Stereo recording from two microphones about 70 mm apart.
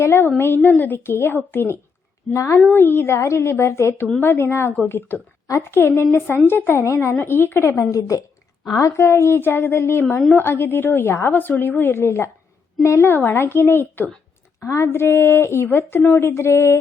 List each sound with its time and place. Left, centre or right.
0.0 s a woman's voice: left
9.0 s a woman's voice: left
13.1 s a woman's voice: left
14.6 s a woman's voice: left
14.8 s a woman's voice: left